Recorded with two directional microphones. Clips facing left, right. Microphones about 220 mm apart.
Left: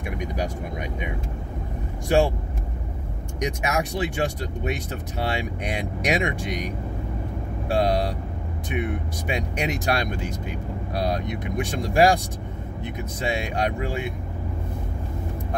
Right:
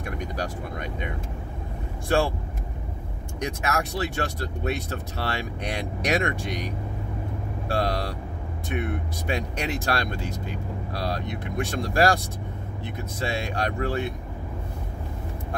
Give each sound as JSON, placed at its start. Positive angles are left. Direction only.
{"t": 0.0, "sound": "speech", "side_deg": 15}
{"t": 3.3, "sound": "speech", "side_deg": 15}